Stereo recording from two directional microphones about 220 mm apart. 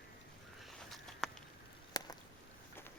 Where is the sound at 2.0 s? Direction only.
15° left (ahead or behind).